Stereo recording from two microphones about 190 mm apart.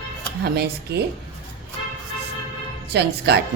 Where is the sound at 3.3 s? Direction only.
65° right (ahead or behind).